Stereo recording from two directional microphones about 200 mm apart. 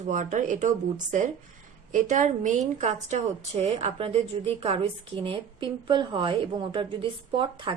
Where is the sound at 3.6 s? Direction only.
30° right (ahead or behind).